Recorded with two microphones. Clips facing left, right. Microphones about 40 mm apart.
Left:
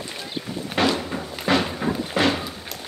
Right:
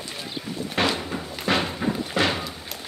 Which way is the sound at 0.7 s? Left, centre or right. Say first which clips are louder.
Left 3 dB; centre.